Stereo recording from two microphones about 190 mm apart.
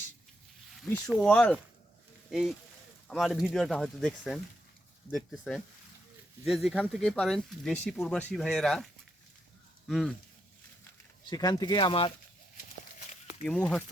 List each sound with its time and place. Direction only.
0.9 s speech: 10° left (ahead or behind)
11.3 s speech: 20° left (ahead or behind)
13.4 s speech: 5° left (ahead or behind)